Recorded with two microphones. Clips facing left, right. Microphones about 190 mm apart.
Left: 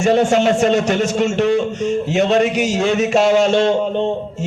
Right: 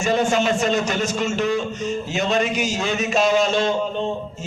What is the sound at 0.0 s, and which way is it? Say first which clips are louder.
Speech: left 6 dB; 75° left (ahead or behind).